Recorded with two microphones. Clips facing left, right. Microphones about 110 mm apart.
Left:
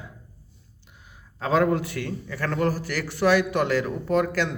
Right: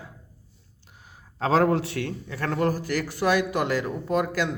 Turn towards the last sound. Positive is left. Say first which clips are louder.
# left 2 dB
turn(degrees=-15)  # may be behind; listen again after turning